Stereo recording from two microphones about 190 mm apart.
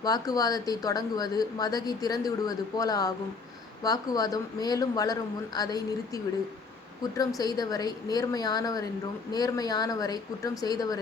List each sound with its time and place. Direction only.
0.0 s speech: 20° left (ahead or behind)
7.3 s speech: 20° left (ahead or behind)